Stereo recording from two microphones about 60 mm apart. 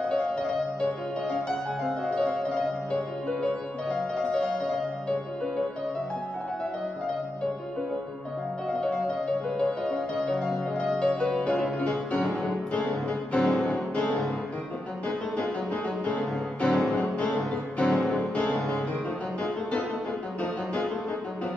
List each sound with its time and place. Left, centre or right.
2.0 s music: centre
8.6 s music: centre
10.1 s music: left
17.9 s music: centre
18.3 s music: left